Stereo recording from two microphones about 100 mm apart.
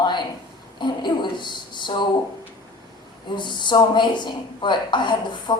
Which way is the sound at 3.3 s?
50° left (ahead or behind).